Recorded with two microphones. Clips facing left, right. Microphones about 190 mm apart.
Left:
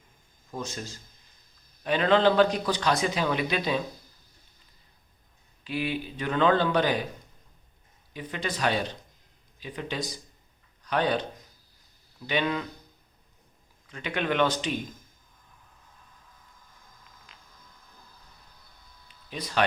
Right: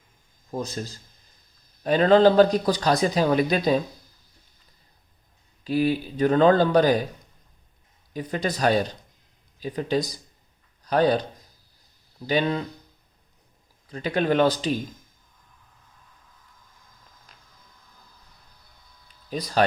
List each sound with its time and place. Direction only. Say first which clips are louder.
0.5 s speech: right 5 dB; 35° right (ahead or behind)
5.6 s speech: right 8 dB; 40° right (ahead or behind)
8.1 s speech: right 6 dB; 40° right (ahead or behind)
13.8 s speech: right 6 dB; 35° right (ahead or behind)
17.3 s a sound: even; 40° right (ahead or behind)
19.0 s a sound: right 6 dB; 40° right (ahead or behind)